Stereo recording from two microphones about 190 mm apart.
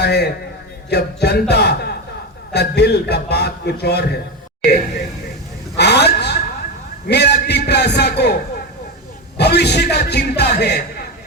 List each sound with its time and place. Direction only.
0.0 s a man's voice: 60° left (ahead or behind)
5.7 s a sound: 60° left (ahead or behind)
7.1 s a man's voice: 60° left (ahead or behind)
9.4 s a man's voice: 60° left (ahead or behind)